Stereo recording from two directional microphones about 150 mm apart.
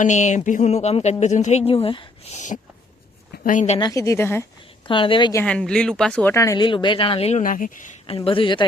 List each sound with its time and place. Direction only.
0.0 s a woman's voice: 55° left (ahead or behind); by 2.4 s 40° left (ahead or behind)
3.3 s speech: 65° left (ahead or behind)
3.8 s speech: 25° left (ahead or behind)
4.9 s speech: 35° left (ahead or behind)
5.5 s speech: 5° left (ahead or behind); by 6.7 s 20° left (ahead or behind)
6.7 s speech: 35° left (ahead or behind)
7.4 s speech: 65° left (ahead or behind)
8.0 s speech: 40° left (ahead or behind)